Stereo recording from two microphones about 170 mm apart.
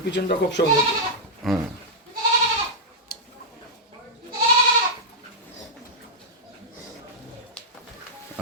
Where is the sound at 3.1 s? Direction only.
65° left (ahead or behind).